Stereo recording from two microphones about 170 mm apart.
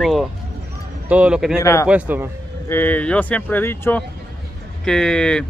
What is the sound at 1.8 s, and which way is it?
Speech, 10° right (ahead or behind).